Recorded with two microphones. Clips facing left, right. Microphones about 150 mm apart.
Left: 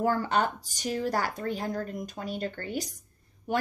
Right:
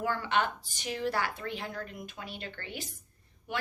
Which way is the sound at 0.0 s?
40° left (ahead or behind).